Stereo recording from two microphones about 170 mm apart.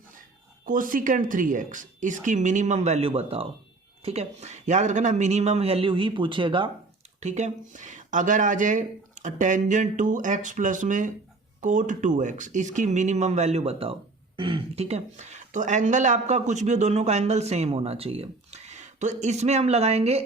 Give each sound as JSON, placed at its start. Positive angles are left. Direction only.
{"t": 0.6, "sound": "speech", "side_deg": -50}
{"t": 7.2, "sound": "speech", "side_deg": -40}